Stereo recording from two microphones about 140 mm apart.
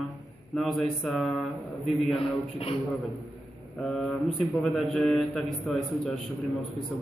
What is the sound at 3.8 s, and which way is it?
A man's voice, centre (ahead or behind).